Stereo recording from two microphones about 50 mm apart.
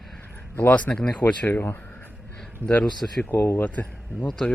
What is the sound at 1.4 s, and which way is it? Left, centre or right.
Speech, left.